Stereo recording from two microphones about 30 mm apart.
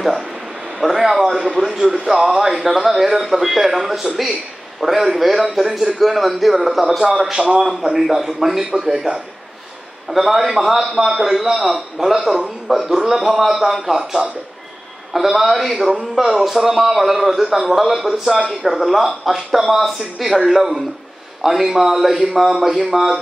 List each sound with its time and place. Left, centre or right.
0.7 s speech: centre
1.8 s a man's voice: right
2.0 s a man's voice: centre
7.4 s a man's voice: right
7.8 s speech: centre
10.6 s a man's voice: centre
15.9 s a man's voice: right
16.3 s speech: centre